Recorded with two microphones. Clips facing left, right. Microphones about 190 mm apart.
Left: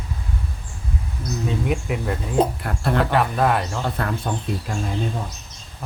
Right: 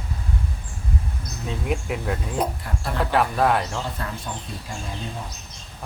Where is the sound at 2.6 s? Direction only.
60° left (ahead or behind).